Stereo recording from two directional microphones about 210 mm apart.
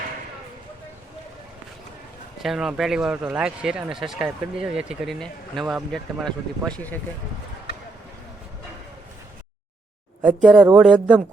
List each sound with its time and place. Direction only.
2.4 s speech: centre (ahead or behind)
10.2 s speech: centre (ahead or behind)